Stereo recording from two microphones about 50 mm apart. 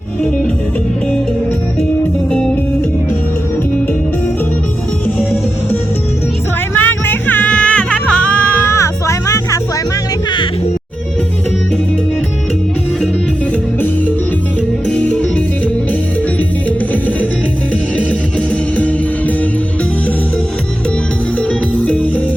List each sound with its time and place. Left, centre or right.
6.7 s music: left
7.4 s music: left
8.6 s music: left
14.8 s music: left
21.8 s music: left